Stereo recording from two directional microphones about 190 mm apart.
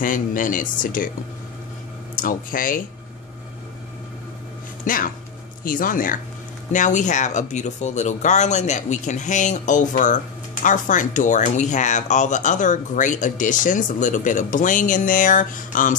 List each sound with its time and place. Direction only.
0.0 s speech: 45° left (ahead or behind)
2.2 s speech: 45° left (ahead or behind)
4.8 s speech: 45° left (ahead or behind)